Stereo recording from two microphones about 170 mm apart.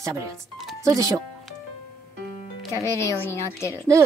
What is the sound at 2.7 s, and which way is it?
Speech, 15° left (ahead or behind).